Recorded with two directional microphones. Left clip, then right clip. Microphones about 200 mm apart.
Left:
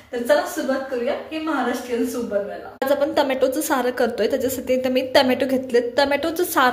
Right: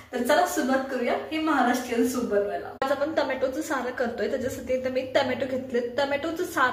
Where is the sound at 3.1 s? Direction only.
45° left (ahead or behind).